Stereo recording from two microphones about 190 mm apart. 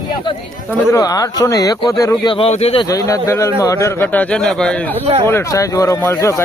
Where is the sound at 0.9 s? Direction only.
20° left (ahead or behind).